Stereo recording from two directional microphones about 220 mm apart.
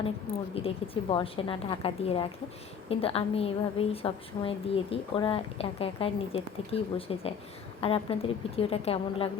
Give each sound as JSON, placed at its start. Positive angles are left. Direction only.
{"t": 0.6, "sound": "a woman's voice", "side_deg": 25}